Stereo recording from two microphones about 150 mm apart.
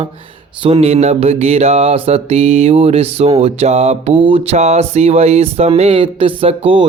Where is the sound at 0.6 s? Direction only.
40° right (ahead or behind).